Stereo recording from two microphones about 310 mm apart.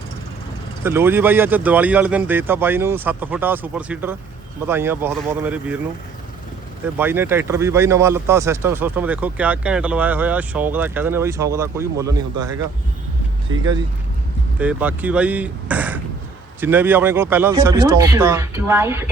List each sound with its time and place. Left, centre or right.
0.9 s speech: centre
6.8 s speech: centre
13.5 s speech: right
14.6 s speech: centre